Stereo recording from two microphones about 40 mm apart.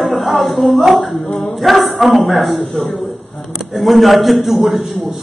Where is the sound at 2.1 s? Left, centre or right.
Centre.